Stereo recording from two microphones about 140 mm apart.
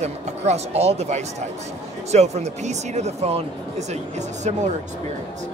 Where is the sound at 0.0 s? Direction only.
50° right (ahead or behind).